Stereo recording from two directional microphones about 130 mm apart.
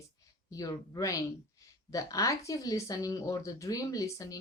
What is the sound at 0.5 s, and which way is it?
Speech, 30° left (ahead or behind).